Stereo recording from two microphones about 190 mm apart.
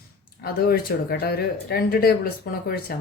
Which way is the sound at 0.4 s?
55° left (ahead or behind).